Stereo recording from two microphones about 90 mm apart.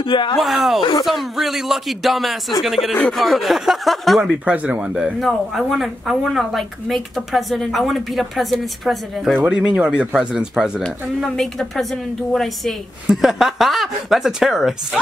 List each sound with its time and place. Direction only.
0.0 s speech: 60° left (ahead or behind)
0.4 s a woman's voice: centre (ahead or behind)
2.9 s a woman's voice: 5° left (ahead or behind)
4.5 s speech: 10° right (ahead or behind)
5.2 s a woman's voice: centre (ahead or behind)
9.4 s speech: 10° right (ahead or behind)
10.8 s a woman's voice: centre (ahead or behind)